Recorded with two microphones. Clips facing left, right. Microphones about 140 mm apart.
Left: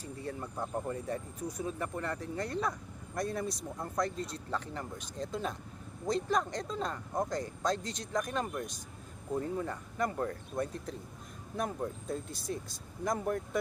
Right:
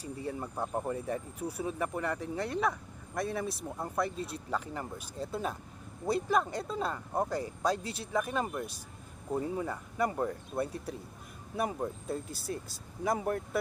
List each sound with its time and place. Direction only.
0.0 s speech: 10° right (ahead or behind)
0.4 s speech: 35° right (ahead or behind)
0.9 s speech: 10° right (ahead or behind)